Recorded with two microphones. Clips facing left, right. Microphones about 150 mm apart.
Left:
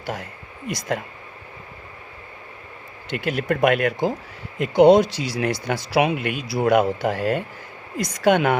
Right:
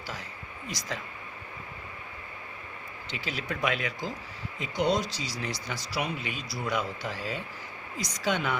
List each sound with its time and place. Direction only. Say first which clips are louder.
0.0 s speech: left 9 dB; 60° left (ahead or behind)
3.1 s speech: left 12 dB; 55° left (ahead or behind)